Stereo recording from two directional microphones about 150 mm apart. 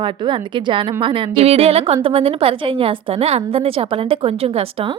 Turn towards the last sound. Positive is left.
turn(degrees=-40)  # may be behind; listen again after turning